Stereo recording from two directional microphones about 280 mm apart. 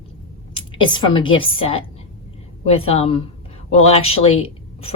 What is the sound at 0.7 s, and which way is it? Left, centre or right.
Speech, centre.